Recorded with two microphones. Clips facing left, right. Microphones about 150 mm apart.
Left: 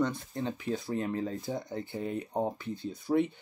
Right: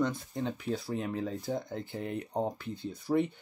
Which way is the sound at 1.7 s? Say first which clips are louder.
Left 2 dB; 10° left (ahead or behind).